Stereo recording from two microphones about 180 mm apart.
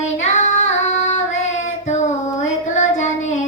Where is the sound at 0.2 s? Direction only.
40° left (ahead or behind).